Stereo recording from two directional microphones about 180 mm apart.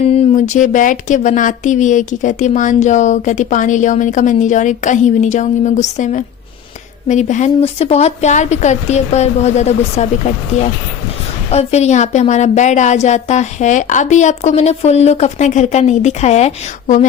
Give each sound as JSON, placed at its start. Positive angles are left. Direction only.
{"t": 0.1, "sound": "a woman's voice", "side_deg": 40}